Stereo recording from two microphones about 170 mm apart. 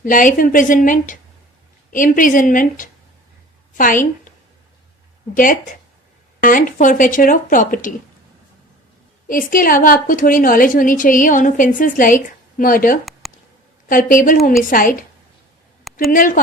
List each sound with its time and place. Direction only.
0.0 s a woman's voice: 50° left (ahead or behind)
5.3 s a woman's voice: 55° left (ahead or behind)
9.2 s a woman's voice: 55° left (ahead or behind)
13.2 s a sound: centre (ahead or behind)
13.8 s a woman's voice: 55° left (ahead or behind)
15.8 s a sound: centre (ahead or behind)
16.1 s a woman's voice: 50° left (ahead or behind)